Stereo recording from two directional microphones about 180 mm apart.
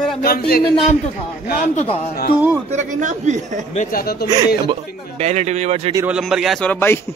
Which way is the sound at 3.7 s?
45° left (ahead or behind).